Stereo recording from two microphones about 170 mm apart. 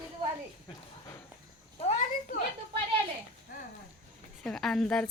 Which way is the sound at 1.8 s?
35° left (ahead or behind).